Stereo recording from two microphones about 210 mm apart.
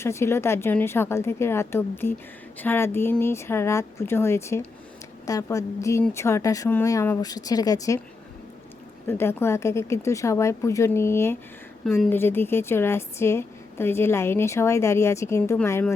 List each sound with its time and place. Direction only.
0.0 s a woman's voice: 15° left (ahead or behind)
9.0 s a woman's voice: 10° left (ahead or behind)